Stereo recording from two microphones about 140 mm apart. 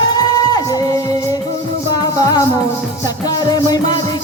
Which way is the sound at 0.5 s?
30° left (ahead or behind).